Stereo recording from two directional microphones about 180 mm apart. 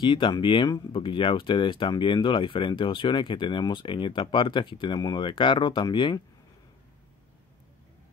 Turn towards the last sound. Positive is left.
turn(degrees=25)  # may be behind; listen again after turning